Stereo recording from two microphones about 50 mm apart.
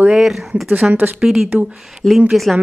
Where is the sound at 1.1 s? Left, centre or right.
Centre.